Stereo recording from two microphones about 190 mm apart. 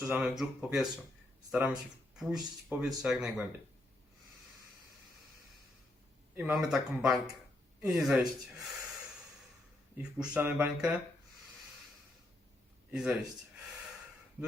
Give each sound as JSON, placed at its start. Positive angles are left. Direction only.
{"t": 0.1, "sound": "speech", "side_deg": -5}
{"t": 6.3, "sound": "speech", "side_deg": -5}
{"t": 10.0, "sound": "speech", "side_deg": -10}
{"t": 12.9, "sound": "speech", "side_deg": -5}